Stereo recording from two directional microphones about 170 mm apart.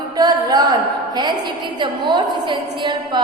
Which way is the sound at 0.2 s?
20° right (ahead or behind).